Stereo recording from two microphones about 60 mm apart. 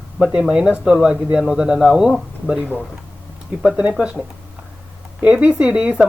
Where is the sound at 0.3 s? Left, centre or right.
Centre.